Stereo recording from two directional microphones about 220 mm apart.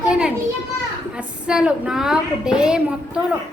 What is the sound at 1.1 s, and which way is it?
A woman's voice, 5° right (ahead or behind).